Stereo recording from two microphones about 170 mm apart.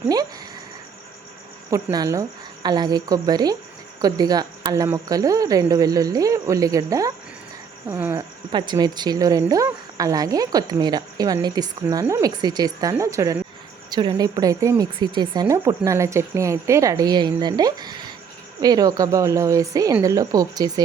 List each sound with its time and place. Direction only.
1.7 s speech: 20° right (ahead or behind)
8.5 s speech: 25° right (ahead or behind)